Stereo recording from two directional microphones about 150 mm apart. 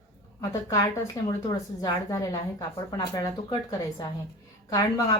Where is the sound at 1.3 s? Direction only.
25° left (ahead or behind).